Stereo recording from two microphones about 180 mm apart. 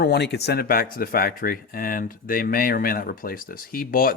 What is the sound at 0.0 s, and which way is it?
Speech, 65° left (ahead or behind).